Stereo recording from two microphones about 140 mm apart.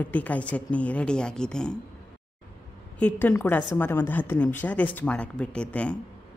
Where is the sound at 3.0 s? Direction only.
10° left (ahead or behind).